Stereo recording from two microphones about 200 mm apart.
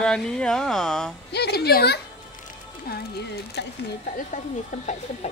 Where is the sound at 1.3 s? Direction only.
55° left (ahead or behind).